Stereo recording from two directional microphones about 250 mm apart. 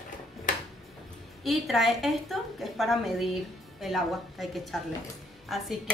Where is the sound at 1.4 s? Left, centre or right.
Centre.